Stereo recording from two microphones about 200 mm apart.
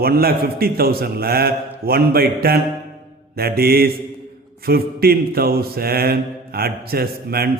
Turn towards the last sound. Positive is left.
turn(degrees=-50)  # may be behind; listen again after turning